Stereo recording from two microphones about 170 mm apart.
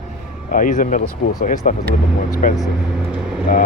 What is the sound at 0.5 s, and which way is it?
Speech, 50° left (ahead or behind).